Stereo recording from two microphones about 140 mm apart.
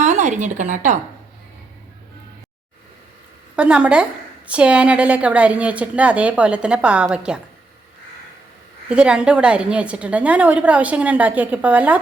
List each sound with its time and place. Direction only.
0.0 s speech: 55° right (ahead or behind)
3.5 s a woman's voice: 5° right (ahead or behind)
8.9 s a woman's voice: 5° right (ahead or behind)